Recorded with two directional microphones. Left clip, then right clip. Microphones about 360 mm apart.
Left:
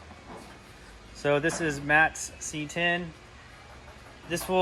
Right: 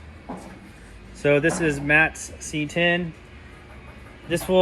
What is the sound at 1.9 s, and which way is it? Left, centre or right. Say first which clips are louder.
Speech: right 3 dB; centre.